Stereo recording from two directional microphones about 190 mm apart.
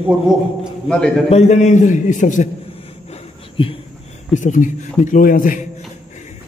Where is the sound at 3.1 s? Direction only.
30° left (ahead or behind).